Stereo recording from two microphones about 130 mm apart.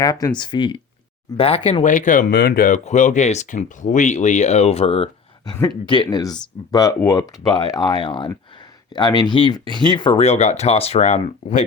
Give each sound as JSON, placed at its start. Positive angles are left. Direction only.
{"t": 0.0, "sound": "speech", "side_deg": 30}
{"t": 1.8, "sound": "speech", "side_deg": 75}
{"t": 5.6, "sound": "speech", "side_deg": 35}